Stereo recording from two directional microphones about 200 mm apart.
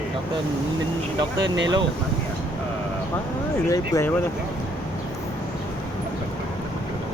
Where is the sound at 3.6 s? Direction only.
15° left (ahead or behind).